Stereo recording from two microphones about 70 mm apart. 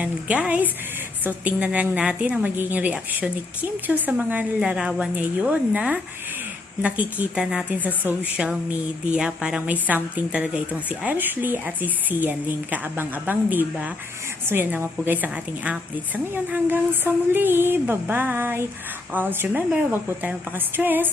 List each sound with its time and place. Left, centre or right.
0.0 s a woman's voice: centre
4.6 s a woman's voice: centre
9.1 s a woman's voice: centre; by 21.1 s right